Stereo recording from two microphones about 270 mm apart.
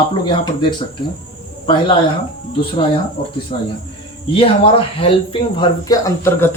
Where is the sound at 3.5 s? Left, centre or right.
Left.